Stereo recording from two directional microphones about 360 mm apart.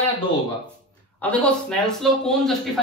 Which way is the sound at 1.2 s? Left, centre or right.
Centre.